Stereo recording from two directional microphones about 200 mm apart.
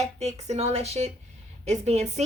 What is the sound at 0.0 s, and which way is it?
Speech, 35° right (ahead or behind).